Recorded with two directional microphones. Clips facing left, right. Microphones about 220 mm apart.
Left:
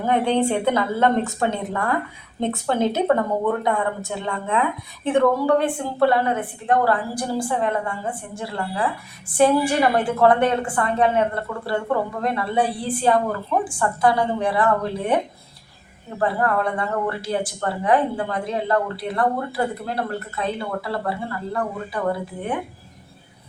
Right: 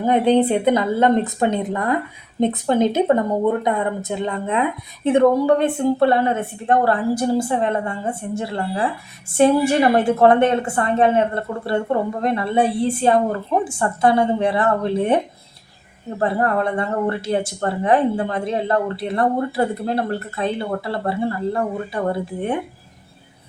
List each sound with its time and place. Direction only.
0.0 s a woman's voice: 15° right (ahead or behind)
16.2 s speech: 25° right (ahead or behind)